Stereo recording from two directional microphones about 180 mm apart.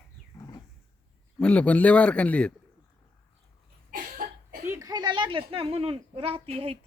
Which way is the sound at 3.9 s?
50° right (ahead or behind).